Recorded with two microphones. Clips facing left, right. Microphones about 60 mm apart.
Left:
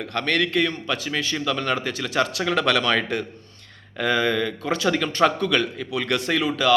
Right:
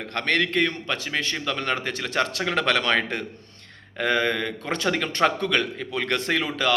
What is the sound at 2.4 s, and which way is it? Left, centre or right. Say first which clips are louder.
A man's voice: left 2 dB; right.